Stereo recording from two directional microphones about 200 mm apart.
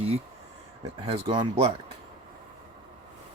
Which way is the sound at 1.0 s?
30° right (ahead or behind).